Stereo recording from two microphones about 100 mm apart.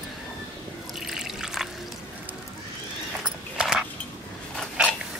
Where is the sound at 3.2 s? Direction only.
10° right (ahead or behind).